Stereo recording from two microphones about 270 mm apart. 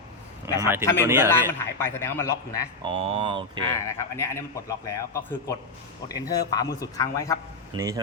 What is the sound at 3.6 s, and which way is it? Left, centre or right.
A man's voice, centre.